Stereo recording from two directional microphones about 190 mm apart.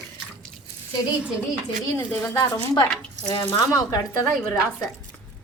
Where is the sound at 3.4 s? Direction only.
15° left (ahead or behind).